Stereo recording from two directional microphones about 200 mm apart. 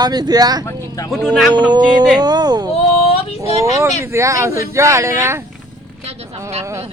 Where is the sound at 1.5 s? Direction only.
20° right (ahead or behind).